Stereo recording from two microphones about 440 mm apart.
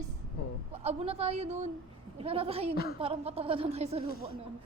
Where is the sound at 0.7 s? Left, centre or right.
Centre.